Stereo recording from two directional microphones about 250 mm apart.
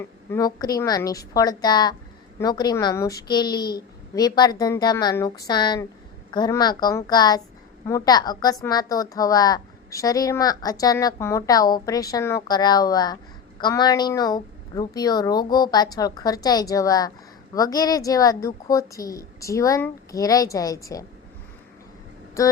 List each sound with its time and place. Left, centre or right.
0.3 s a woman's voice: centre
22.4 s a woman's voice: centre